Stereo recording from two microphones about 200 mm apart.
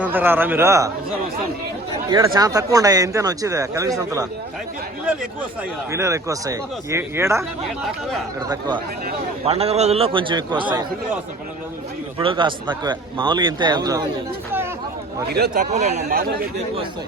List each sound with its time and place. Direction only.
0.0 s a man's voice: 10° right (ahead or behind)
2.0 s a man's voice: 15° right (ahead or behind)
5.9 s a man's voice: 15° right (ahead or behind)
8.4 s a man's voice: 20° right (ahead or behind)
12.2 s a man's voice: 25° right (ahead or behind)
15.3 s speech: 50° right (ahead or behind)
15.7 s speech: 35° right (ahead or behind)